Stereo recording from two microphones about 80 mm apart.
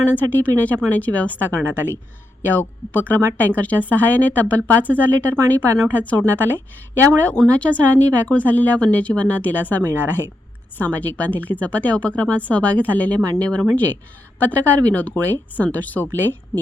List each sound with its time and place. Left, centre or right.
0.1 s speech: left